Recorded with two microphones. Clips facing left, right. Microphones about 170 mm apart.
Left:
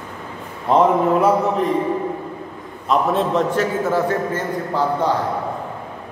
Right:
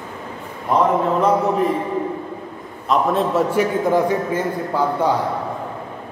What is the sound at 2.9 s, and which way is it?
Speech, centre (ahead or behind).